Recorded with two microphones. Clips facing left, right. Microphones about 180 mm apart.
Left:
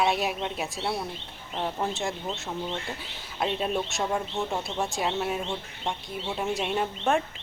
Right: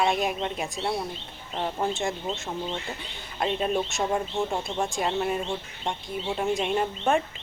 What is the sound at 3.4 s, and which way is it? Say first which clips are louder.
Speech: right 2 dB; centre (ahead or behind).